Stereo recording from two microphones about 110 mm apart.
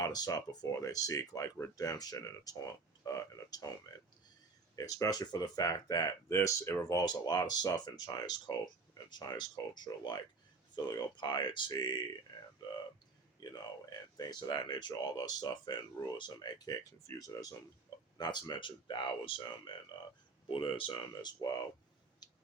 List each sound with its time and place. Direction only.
0.0 s speech: 35° left (ahead or behind)
4.8 s speech: 35° left (ahead or behind)
6.2 s speech: 25° left (ahead or behind)
7.0 s speech: 40° left (ahead or behind)
13.4 s speech: 40° left (ahead or behind)
22.2 s a sound: 40° left (ahead or behind)